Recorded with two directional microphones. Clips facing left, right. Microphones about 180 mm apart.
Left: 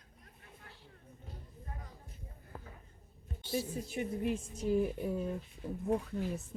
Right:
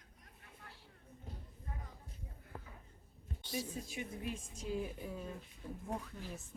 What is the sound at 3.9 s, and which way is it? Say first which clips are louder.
Speech: left 8 dB; 55° left (ahead or behind).